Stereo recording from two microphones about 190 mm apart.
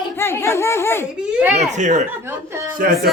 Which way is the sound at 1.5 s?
35° right (ahead or behind).